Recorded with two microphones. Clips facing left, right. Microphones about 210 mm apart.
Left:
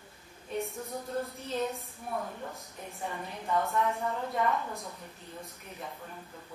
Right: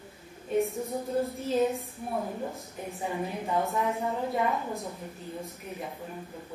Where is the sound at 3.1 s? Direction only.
20° right (ahead or behind).